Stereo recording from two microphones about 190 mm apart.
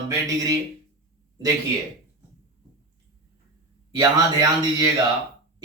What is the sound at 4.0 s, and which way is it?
Speech, 20° right (ahead or behind).